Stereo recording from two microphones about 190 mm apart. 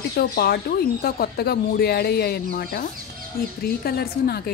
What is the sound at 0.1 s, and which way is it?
Speech, 55° left (ahead or behind).